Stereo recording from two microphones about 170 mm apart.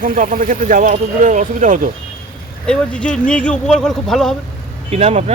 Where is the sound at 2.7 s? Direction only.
5° left (ahead or behind).